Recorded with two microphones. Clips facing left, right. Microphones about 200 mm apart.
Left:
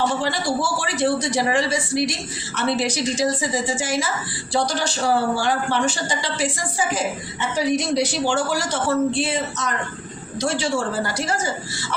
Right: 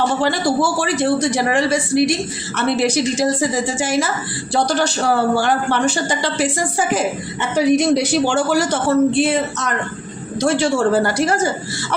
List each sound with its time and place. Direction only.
0.2 s speech: 60° right (ahead or behind)